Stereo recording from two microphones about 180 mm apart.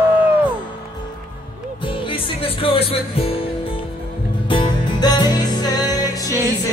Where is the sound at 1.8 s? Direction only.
30° left (ahead or behind).